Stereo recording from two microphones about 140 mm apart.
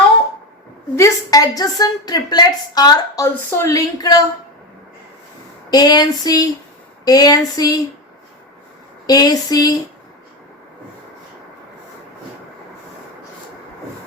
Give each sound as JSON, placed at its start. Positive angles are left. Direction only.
{"t": 0.9, "sound": "a woman's voice", "side_deg": 25}
{"t": 5.7, "sound": "a woman's voice", "side_deg": 30}
{"t": 9.0, "sound": "a woman's voice", "side_deg": 30}